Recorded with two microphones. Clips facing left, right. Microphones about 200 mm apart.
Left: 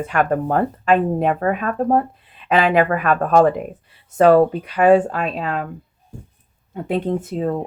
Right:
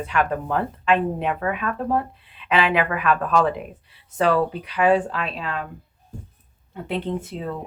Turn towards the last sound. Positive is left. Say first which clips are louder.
# left 7 dB
turn(degrees=45)  # may be behind; listen again after turning